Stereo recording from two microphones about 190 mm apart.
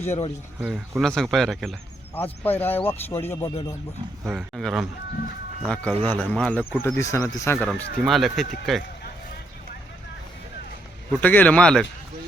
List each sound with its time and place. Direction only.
0.0 s speech: 35° left (ahead or behind)
0.6 s speech: centre (ahead or behind); by 3.5 s 15° left (ahead or behind)
4.2 s speech: 10° right (ahead or behind)
6.8 s speech: 15° left (ahead or behind)
7.7 s speech: centre (ahead or behind)
11.2 s speech: 10° left (ahead or behind)